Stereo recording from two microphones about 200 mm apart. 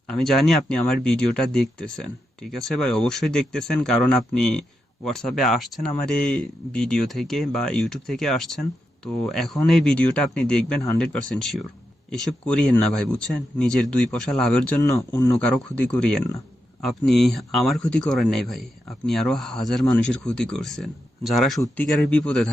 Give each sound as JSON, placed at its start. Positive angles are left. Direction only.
{"t": 0.1, "sound": "speech", "side_deg": 0}
{"t": 14.8, "sound": "speech", "side_deg": 15}